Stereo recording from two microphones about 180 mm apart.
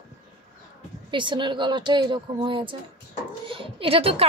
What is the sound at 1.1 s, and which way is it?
A woman's voice, 25° right (ahead or behind).